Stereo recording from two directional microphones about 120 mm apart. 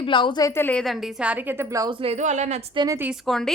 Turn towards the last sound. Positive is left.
turn(degrees=5)  # may be behind; listen again after turning